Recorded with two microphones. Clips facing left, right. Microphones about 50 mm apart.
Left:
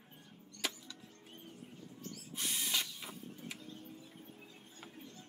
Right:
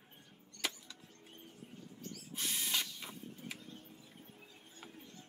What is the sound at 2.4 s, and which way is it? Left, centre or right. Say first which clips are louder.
Tools: even; centre.